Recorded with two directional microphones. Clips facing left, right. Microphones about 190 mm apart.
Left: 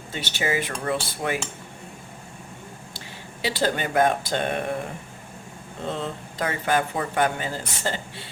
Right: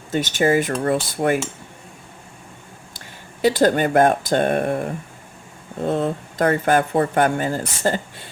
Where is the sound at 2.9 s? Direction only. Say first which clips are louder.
Left 1 dB; 50° right (ahead or behind).